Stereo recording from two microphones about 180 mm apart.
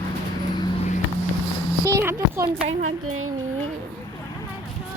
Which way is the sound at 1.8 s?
15° right (ahead or behind).